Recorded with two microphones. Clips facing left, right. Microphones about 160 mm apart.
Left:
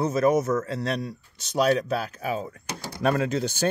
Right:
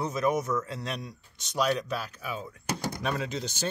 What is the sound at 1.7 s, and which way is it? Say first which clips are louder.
Speech: left 6 dB; 45° left (ahead or behind).